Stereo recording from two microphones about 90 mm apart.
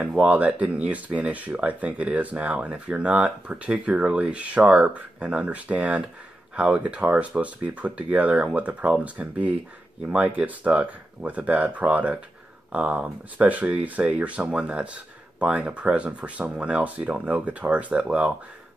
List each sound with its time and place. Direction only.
0.0 s speech: 15° right (ahead or behind)